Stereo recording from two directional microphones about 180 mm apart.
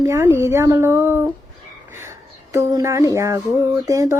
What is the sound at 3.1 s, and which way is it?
A woman's voice, 15° right (ahead or behind).